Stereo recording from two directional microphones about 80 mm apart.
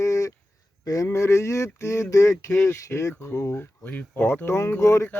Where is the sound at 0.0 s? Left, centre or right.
Left.